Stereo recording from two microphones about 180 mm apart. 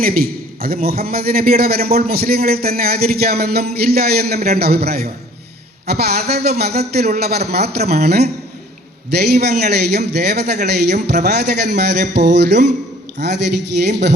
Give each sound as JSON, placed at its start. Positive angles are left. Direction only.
{"t": 0.0, "sound": "a man's voice", "side_deg": -55}